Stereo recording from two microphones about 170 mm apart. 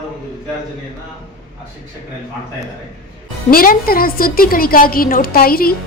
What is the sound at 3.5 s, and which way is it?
A woman's voice, 60° left (ahead or behind).